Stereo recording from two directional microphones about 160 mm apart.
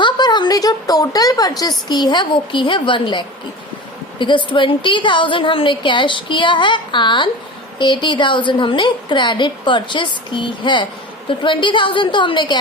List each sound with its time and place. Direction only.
0.0 s a woman's voice: 25° left (ahead or behind)